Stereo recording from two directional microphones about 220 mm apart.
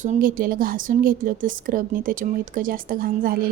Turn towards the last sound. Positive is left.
turn(degrees=-40)  # may be behind; listen again after turning